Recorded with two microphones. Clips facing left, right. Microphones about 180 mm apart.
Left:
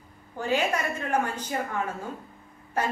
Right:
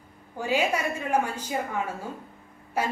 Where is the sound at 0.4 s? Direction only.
10° right (ahead or behind).